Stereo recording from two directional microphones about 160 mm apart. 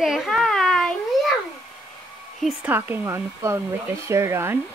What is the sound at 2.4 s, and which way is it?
Speech, 5° right (ahead or behind).